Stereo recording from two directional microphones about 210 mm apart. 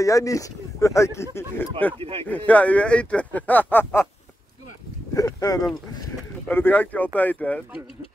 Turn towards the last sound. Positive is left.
turn(degrees=5)  # may be behind; listen again after turning